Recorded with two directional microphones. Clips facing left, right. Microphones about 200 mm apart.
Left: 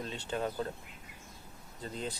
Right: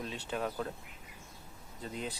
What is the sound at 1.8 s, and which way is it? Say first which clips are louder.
Speech: left 1 dB; 5° right (ahead or behind).